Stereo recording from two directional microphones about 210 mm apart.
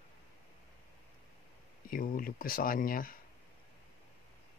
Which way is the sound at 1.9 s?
45° left (ahead or behind).